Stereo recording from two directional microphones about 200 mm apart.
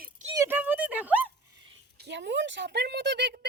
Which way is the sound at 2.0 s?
60° right (ahead or behind).